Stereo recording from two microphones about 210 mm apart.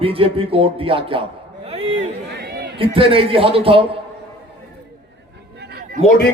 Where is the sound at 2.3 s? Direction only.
50° right (ahead or behind).